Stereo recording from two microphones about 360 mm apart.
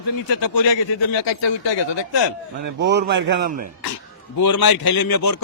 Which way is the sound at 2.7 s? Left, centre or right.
Right.